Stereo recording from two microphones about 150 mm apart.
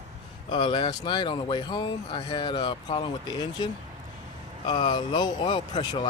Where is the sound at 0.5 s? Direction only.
35° left (ahead or behind).